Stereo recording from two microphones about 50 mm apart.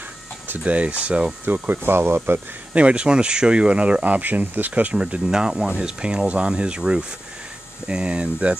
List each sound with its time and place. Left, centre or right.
0.7 s speech: right
1.4 s speech: right
1.9 s speech: right
2.7 s speech: right
4.9 s speech: centre